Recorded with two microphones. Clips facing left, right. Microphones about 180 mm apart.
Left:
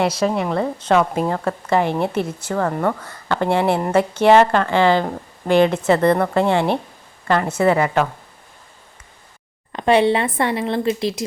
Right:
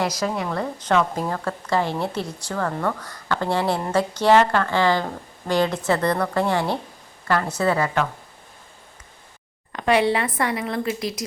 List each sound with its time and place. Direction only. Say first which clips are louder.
0.0 s speech: left 5 dB; 25° left (ahead or behind)
9.7 s speech: left 4 dB; 25° left (ahead or behind)